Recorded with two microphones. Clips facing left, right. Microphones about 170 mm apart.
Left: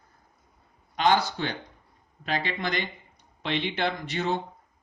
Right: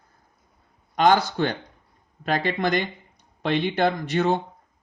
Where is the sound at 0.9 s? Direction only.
50° right (ahead or behind).